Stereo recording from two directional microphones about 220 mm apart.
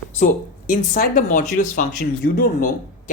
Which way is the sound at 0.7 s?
40° left (ahead or behind).